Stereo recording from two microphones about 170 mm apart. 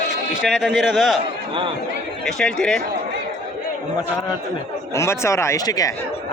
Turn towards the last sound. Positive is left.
turn(degrees=20)  # may be behind; listen again after turning